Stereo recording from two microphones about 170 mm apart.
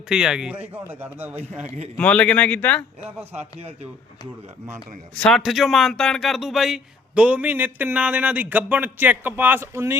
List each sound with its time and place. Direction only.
0.1 s speech: 5° right (ahead or behind)
1.6 s a man's voice: 40° right (ahead or behind)
2.0 s speech: 5° left (ahead or behind)
3.6 s a man's voice: 35° right (ahead or behind)
5.1 s speech: 5° left (ahead or behind); by 10.0 s 15° right (ahead or behind)